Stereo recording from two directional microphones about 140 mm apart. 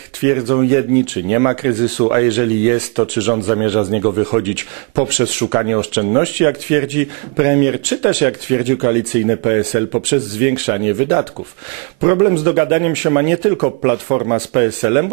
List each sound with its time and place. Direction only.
0.3 s speech: 20° right (ahead or behind)
5.0 s speech: 10° right (ahead or behind)
5.5 s speech: 25° right (ahead or behind)